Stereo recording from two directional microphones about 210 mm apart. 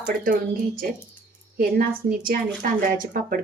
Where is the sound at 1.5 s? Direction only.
45° right (ahead or behind).